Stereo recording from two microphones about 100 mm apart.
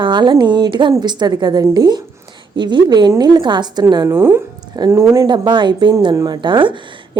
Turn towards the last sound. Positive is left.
turn(degrees=-55)  # may be behind; listen again after turning